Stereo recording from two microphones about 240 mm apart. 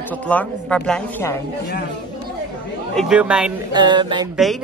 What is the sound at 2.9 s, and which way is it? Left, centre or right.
Speech, centre.